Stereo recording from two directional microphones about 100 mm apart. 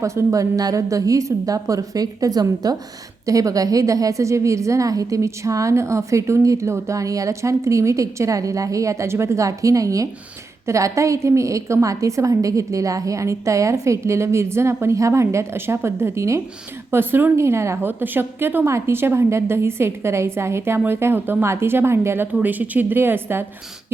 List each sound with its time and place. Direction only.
0.0 s a woman's voice: 30° right (ahead or behind)